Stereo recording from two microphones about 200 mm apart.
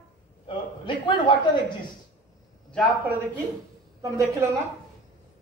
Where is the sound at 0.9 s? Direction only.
25° left (ahead or behind).